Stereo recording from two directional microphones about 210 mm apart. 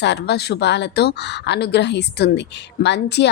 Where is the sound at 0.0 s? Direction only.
55° left (ahead or behind).